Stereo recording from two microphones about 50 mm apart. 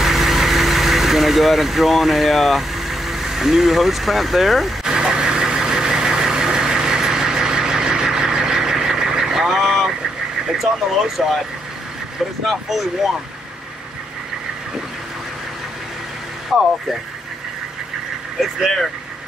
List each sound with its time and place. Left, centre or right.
0.0 s vehicle: centre
10.6 s speech: centre
12.4 s speech: centre
16.5 s speech: centre
18.4 s speech: centre